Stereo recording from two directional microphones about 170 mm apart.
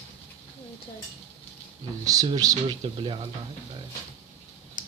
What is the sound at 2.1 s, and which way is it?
Speech, 20° right (ahead or behind).